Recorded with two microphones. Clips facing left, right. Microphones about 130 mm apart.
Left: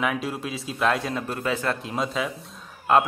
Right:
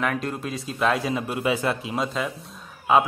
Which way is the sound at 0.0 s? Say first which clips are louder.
Even; 5° left (ahead or behind).